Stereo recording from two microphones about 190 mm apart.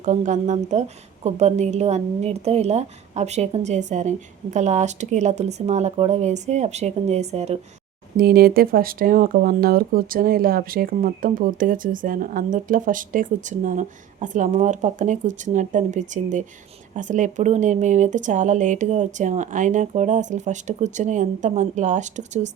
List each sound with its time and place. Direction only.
0.0 s speech: 40° right (ahead or behind)
8.1 s speech: 50° right (ahead or behind)